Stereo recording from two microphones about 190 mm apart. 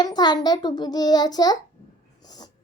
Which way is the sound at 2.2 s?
20° left (ahead or behind).